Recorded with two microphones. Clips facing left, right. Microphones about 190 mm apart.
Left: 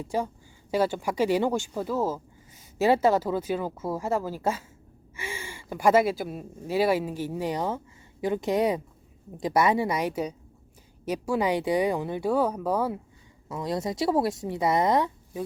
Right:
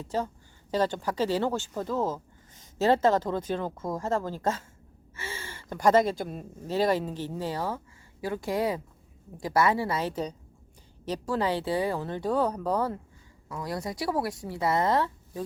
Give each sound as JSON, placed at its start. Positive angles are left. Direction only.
{"t": 0.0, "sound": "speech", "side_deg": 10}
{"t": 13.5, "sound": "speech", "side_deg": 20}